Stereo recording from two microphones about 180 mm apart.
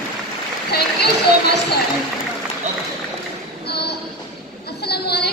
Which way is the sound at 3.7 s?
65° left (ahead or behind).